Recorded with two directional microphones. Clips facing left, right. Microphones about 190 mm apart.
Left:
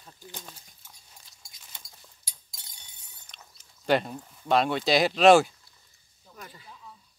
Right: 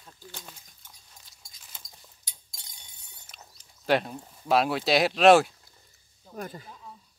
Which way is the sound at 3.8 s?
Centre (ahead or behind).